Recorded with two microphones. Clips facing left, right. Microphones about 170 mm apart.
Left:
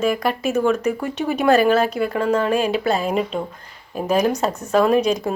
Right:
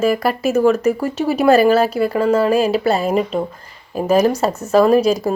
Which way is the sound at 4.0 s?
5° right (ahead or behind).